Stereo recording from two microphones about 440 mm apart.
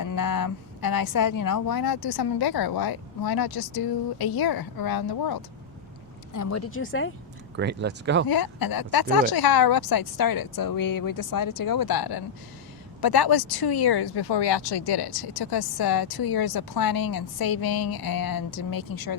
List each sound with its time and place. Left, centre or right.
0.0 s speech: left
6.3 s speech: left
7.5 s speech: right
8.3 s speech: left